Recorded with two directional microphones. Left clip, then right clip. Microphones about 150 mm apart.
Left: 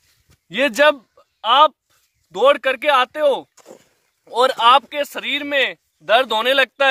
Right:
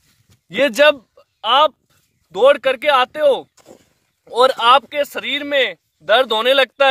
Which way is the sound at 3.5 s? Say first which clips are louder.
Left 2 dB; 25° left (ahead or behind).